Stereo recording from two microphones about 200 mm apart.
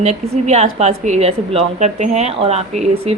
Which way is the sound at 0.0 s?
35° right (ahead or behind).